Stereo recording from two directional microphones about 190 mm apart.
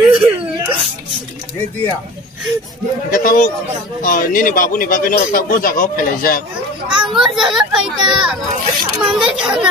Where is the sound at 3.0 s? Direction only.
45° left (ahead or behind).